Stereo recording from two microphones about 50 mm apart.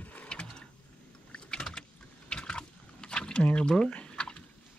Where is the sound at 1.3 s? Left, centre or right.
Centre.